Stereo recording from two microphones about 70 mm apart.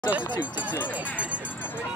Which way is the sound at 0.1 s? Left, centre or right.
Right.